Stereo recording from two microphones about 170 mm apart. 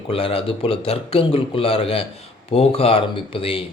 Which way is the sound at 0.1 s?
35° left (ahead or behind).